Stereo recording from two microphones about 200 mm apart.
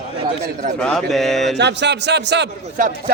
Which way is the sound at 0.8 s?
5° left (ahead or behind).